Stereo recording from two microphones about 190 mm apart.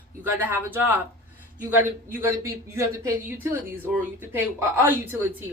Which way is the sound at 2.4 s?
15° right (ahead or behind).